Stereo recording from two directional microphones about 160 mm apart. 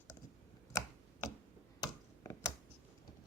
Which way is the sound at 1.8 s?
20° left (ahead or behind).